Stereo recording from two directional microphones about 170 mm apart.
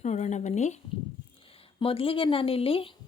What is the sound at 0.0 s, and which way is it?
Speech, 45° left (ahead or behind).